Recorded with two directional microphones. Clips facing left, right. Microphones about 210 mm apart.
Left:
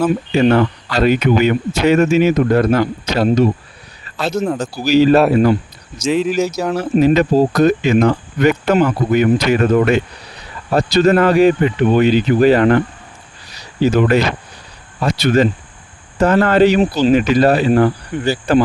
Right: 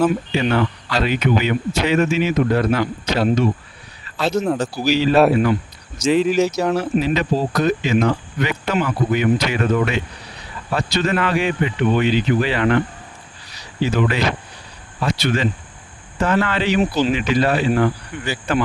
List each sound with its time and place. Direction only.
0.3 s speech: 45° left (ahead or behind)
4.3 s speech: centre (ahead or behind)
4.9 s speech: 45° left (ahead or behind)
6.0 s speech: centre (ahead or behind)
6.9 s speech: 45° left (ahead or behind)
13.8 s speech: 40° left (ahead or behind)